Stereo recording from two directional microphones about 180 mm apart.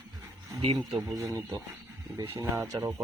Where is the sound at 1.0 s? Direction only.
20° right (ahead or behind).